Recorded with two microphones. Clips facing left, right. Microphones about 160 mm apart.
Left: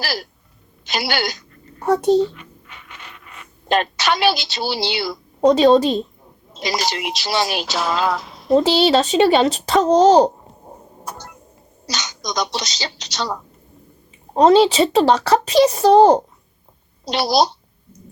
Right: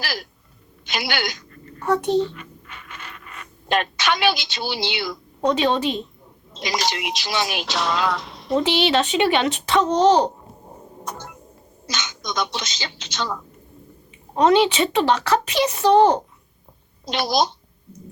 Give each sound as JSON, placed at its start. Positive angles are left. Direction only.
{"t": 0.0, "sound": "a child's voice", "side_deg": 35}
{"t": 3.7, "sound": "a woman's voice", "side_deg": 35}
{"t": 7.6, "sound": "music", "side_deg": 0}
{"t": 8.1, "sound": "a sound", "side_deg": 0}
{"t": 8.5, "sound": "a woman's voice", "side_deg": 35}
{"t": 11.0, "sound": "a sound", "side_deg": 5}
{"t": 11.9, "sound": "a woman's voice", "side_deg": 35}